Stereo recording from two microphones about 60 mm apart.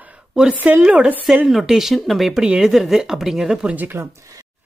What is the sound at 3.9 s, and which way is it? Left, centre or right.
Speech, right.